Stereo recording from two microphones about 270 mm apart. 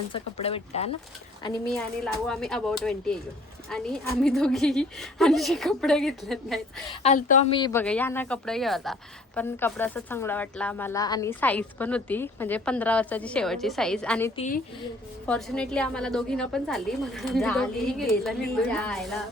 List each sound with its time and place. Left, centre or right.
0.1 s speech: left
2.2 s speech: centre
7.0 s speech: left
7.5 s speech: centre
14.3 s speech: left
15.3 s speech: centre